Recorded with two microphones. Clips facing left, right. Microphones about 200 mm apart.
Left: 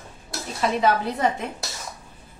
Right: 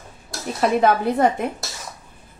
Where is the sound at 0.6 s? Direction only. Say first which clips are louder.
Right 4 dB; 50° right (ahead or behind).